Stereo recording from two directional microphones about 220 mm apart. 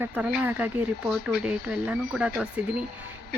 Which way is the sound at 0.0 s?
5° right (ahead or behind).